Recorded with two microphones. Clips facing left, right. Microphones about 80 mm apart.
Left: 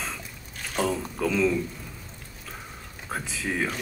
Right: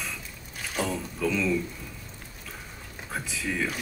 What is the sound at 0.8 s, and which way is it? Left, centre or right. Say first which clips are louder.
Speech: left 2 dB; left.